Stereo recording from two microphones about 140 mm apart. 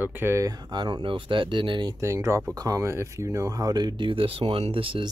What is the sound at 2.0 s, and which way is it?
Speech, 20° right (ahead or behind).